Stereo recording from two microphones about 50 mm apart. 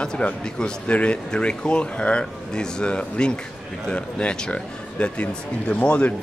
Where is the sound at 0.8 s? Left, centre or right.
Left.